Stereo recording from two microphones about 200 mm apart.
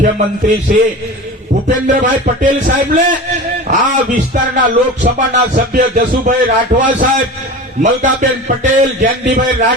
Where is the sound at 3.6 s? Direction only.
40° right (ahead or behind).